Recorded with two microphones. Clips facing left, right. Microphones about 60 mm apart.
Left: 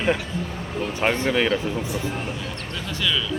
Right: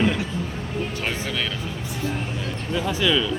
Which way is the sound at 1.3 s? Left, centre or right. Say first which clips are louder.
Left 6 dB; left.